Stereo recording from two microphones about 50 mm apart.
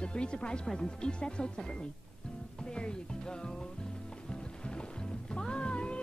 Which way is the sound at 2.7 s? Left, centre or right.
Centre.